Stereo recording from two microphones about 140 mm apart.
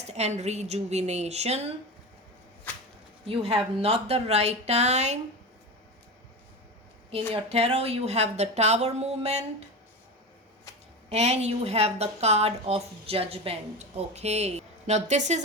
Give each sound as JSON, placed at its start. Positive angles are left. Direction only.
{"t": 0.0, "sound": "a woman's voice", "side_deg": -50}
{"t": 3.2, "sound": "a woman's voice", "side_deg": -45}
{"t": 7.1, "sound": "a woman's voice", "side_deg": -45}
{"t": 11.1, "sound": "a woman's voice", "side_deg": -50}